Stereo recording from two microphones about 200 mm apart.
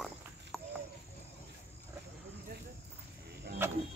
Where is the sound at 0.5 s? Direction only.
Centre (ahead or behind).